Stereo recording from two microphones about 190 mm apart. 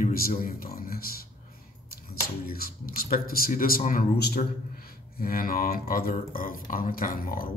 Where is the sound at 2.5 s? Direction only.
50° left (ahead or behind).